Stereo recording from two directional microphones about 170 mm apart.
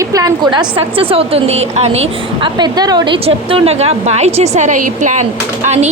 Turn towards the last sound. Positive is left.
turn(degrees=-40)  # may be behind; listen again after turning